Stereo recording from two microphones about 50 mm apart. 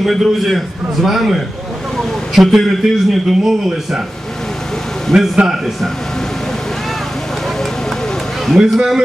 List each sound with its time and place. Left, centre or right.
0.0 s a man's voice: centre
5.1 s a man's voice: centre
8.6 s a man's voice: centre